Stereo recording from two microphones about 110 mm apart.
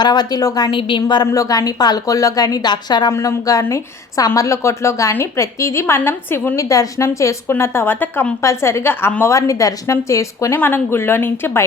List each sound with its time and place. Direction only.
0.0 s a woman's voice: 40° left (ahead or behind)
0.8 s a woman's voice: 50° left (ahead or behind)
3.1 s a woman's voice: 25° left (ahead or behind)
6.6 s a woman's voice: 30° left (ahead or behind)